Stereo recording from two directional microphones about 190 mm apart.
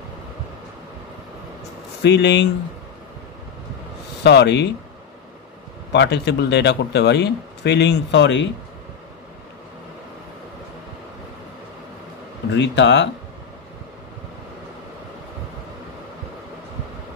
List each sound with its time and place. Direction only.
2.0 s speech: 65° left (ahead or behind)
4.2 s speech: 60° left (ahead or behind)
5.9 s speech: 65° left (ahead or behind)
12.4 s speech: 65° left (ahead or behind)